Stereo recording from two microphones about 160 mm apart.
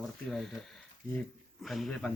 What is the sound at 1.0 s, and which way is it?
Speech, 55° right (ahead or behind).